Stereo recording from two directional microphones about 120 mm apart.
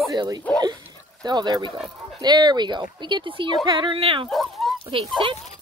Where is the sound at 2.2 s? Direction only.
35° right (ahead or behind).